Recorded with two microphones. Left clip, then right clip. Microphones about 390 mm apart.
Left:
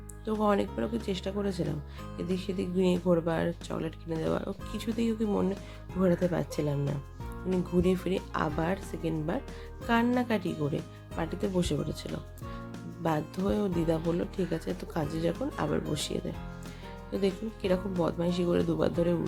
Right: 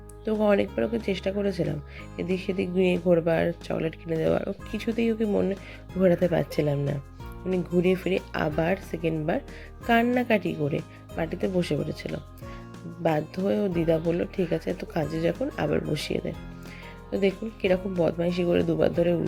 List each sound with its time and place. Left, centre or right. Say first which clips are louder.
0.3 s speech: right 5 dB; centre